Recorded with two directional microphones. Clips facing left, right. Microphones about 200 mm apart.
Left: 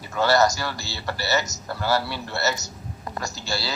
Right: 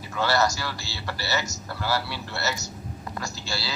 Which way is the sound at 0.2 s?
45° left (ahead or behind).